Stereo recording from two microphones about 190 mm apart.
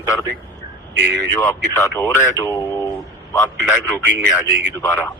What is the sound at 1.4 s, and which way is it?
Speech, 10° left (ahead or behind).